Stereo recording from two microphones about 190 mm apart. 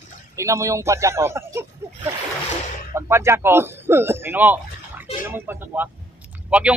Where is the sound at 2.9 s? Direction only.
15° right (ahead or behind).